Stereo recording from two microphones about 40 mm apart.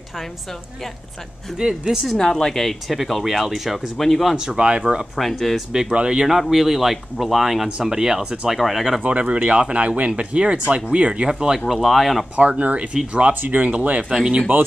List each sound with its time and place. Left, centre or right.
1.6 s speech: centre
2.1 s speech: centre
4.4 s speech: right
5.1 s speech: centre
5.7 s speech: centre
6.5 s speech: centre
7.8 s speech: centre
8.5 s speech: centre
9.0 s speech: right
11.6 s speech: centre
12.4 s speech: right
13.3 s speech: right
14.5 s speech: right